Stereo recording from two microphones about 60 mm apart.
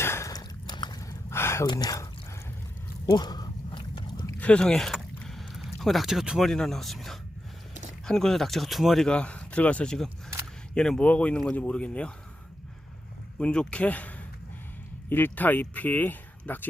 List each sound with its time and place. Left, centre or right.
0.0 s a sound: left
1.3 s gasp: left
4.4 s a sound: centre
6.4 s speech: centre
9.0 s speech: centre
13.4 s speech: centre; by 16.6 s left